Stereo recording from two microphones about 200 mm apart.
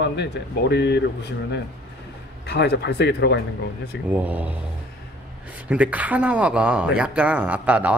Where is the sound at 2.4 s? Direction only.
60° left (ahead or behind).